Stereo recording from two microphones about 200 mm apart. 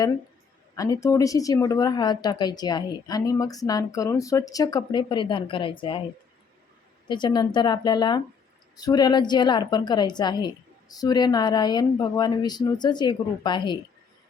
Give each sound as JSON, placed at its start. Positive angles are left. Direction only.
{"t": 0.8, "sound": "a woman's voice", "side_deg": 15}
{"t": 7.1, "sound": "a woman's voice", "side_deg": 20}